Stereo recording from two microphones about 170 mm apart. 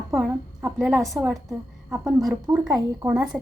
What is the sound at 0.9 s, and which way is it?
Speech, 15° right (ahead or behind).